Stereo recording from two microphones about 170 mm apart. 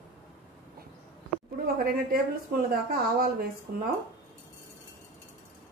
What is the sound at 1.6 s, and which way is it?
Speech, 60° right (ahead or behind).